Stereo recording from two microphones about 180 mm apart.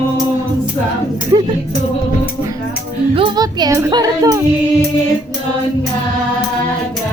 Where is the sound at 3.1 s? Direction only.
30° right (ahead or behind).